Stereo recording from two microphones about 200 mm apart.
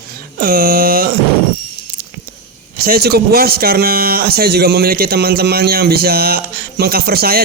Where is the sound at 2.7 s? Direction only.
50° right (ahead or behind).